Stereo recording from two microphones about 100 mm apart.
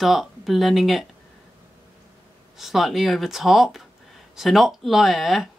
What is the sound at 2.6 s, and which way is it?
Speech, centre (ahead or behind).